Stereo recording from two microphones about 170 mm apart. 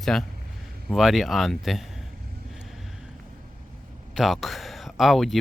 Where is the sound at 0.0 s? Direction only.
5° left (ahead or behind).